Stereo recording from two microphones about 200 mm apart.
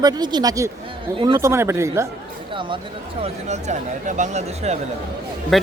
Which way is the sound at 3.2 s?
35° right (ahead or behind).